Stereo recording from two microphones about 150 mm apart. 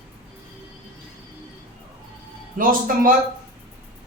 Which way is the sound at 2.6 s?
65° right (ahead or behind).